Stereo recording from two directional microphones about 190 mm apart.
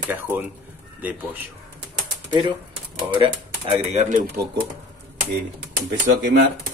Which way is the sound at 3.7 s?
40° right (ahead or behind).